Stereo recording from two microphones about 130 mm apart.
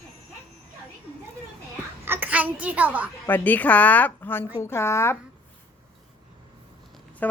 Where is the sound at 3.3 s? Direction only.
10° left (ahead or behind).